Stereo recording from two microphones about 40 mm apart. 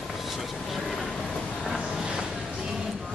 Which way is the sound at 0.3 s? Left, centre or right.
Centre.